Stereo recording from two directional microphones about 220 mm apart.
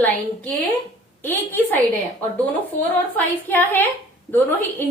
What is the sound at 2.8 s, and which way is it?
A woman's voice, 10° left (ahead or behind).